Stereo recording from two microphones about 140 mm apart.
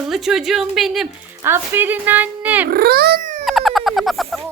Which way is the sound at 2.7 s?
90° right.